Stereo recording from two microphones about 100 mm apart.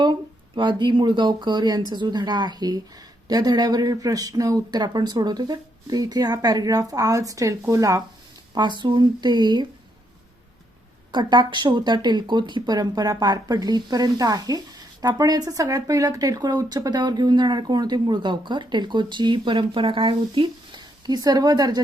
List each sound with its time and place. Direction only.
0.5 s speech: 50° right (ahead or behind); by 8.0 s 35° right (ahead or behind)
8.5 s speech: 50° right (ahead or behind)
11.1 s speech: 50° right (ahead or behind)